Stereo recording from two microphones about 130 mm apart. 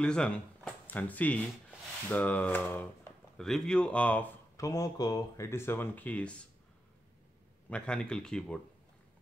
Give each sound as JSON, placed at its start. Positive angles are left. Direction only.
{"t": 0.0, "sound": "speech", "side_deg": 10}
{"t": 3.3, "sound": "speech", "side_deg": 5}
{"t": 4.6, "sound": "speech", "side_deg": 25}
{"t": 7.7, "sound": "speech", "side_deg": 10}